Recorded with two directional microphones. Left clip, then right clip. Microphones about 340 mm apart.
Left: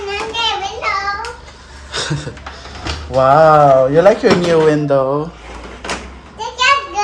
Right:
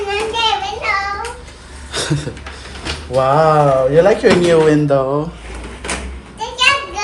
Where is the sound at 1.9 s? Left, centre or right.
Centre.